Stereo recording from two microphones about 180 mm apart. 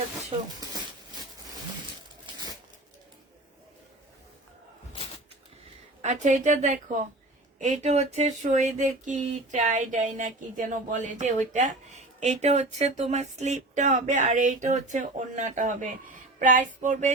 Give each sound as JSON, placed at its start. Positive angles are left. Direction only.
{"t": 6.0, "sound": "speech", "side_deg": -40}